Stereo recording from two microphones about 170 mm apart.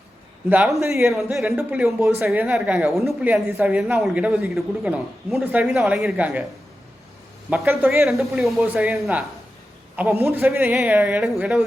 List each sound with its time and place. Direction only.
0.5 s a woman's voice: 5° right (ahead or behind)
7.7 s a woman's voice: 10° right (ahead or behind)